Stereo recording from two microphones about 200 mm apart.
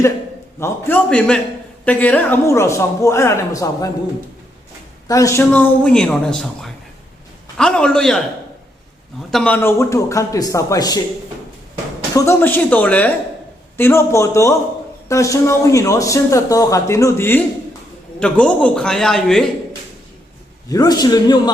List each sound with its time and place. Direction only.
0.6 s a man's voice: 10° left (ahead or behind)
5.0 s a man's voice: 15° left (ahead or behind)
7.5 s a man's voice: 5° left (ahead or behind)
9.3 s a man's voice: 5° left (ahead or behind)
12.1 s a man's voice: 15° left (ahead or behind)
20.7 s a man's voice: 20° left (ahead or behind)